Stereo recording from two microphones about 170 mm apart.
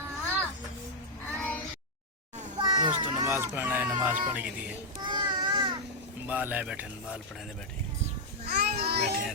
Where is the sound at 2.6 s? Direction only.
25° right (ahead or behind).